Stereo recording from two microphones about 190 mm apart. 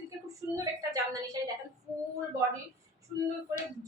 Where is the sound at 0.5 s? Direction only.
15° right (ahead or behind).